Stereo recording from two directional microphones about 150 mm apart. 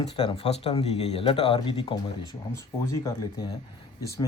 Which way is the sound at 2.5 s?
20° left (ahead or behind).